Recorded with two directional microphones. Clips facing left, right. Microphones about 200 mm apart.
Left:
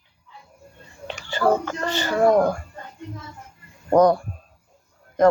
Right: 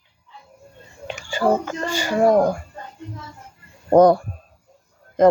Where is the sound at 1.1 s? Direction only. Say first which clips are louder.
Right 1 dB; 10° right (ahead or behind).